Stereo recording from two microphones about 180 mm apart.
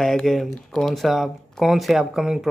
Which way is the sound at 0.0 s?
Centre (ahead or behind).